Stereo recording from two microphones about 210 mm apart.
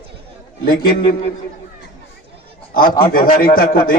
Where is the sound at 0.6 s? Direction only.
45° left (ahead or behind).